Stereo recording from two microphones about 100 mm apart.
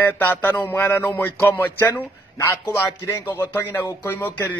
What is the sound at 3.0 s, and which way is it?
A man's voice, 25° left (ahead or behind).